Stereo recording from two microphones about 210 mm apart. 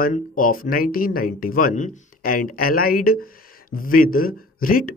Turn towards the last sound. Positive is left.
turn(degrees=40)  # may be behind; listen again after turning